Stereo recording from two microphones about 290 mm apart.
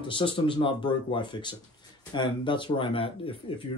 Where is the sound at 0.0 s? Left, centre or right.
Centre.